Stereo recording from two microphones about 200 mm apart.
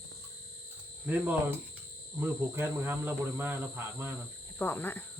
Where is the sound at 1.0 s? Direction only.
10° right (ahead or behind).